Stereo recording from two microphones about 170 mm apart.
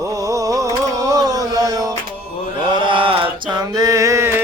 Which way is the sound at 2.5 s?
30° right (ahead or behind).